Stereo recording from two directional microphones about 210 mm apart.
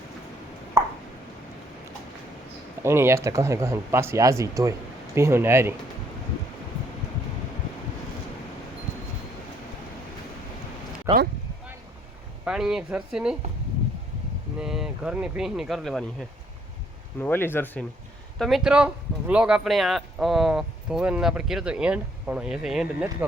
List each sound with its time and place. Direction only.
0.8 s a sound: 15° right (ahead or behind)
2.8 s speech: 10° right (ahead or behind)
11.1 s a sound: 20° right (ahead or behind)
12.5 s speech: 5° right (ahead or behind)
14.6 s speech: 5° right (ahead or behind)
17.2 s speech: 10° left (ahead or behind)